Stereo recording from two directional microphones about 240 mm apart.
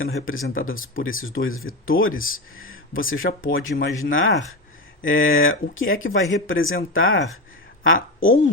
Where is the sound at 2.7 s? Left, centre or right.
Left.